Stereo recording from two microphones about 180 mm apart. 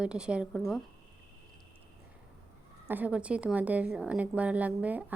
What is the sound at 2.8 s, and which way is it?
A woman's voice, 10° right (ahead or behind).